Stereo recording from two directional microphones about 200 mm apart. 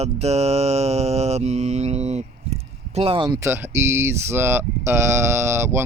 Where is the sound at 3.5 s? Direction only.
10° right (ahead or behind).